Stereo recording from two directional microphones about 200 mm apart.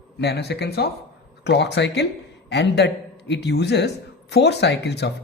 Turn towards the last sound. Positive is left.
turn(degrees=60)  # may be behind; listen again after turning